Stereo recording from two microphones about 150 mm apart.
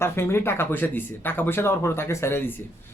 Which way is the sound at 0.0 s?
15° left (ahead or behind).